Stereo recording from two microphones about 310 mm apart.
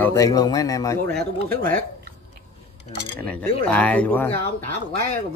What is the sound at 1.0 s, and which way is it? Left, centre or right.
Speech, right.